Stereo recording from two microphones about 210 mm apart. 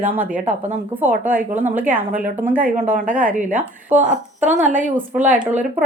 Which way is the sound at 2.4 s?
10° right (ahead or behind).